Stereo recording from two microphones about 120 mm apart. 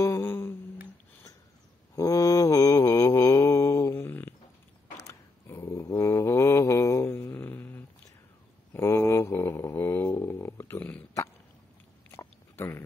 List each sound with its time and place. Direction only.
0.0 s humming: 20° left (ahead or behind)
2.0 s mantra: 25° left (ahead or behind)
12.2 s biting: 20° left (ahead or behind)